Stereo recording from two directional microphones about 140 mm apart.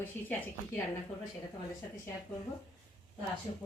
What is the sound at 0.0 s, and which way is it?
Speech, 15° left (ahead or behind).